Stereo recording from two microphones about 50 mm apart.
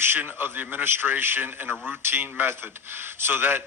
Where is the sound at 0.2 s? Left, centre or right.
Right.